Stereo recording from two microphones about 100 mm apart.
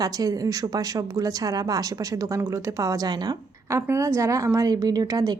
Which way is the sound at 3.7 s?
30° right (ahead or behind).